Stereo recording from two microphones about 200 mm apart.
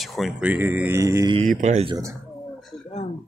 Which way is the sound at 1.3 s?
35° right (ahead or behind).